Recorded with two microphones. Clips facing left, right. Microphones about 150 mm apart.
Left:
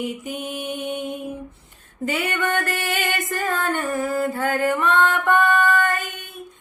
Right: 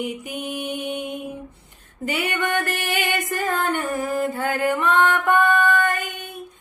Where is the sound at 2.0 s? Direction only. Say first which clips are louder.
Left 1 dB; 15° right (ahead or behind).